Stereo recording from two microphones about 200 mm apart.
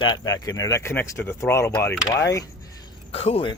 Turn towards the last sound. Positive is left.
turn(degrees=30)  # may be behind; listen again after turning